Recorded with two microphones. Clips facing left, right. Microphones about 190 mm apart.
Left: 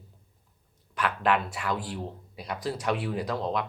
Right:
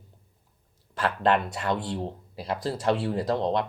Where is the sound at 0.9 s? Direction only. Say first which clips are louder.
Right 2 dB; 25° right (ahead or behind).